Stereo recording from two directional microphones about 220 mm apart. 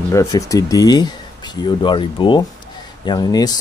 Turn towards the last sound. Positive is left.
turn(degrees=20)  # may be behind; listen again after turning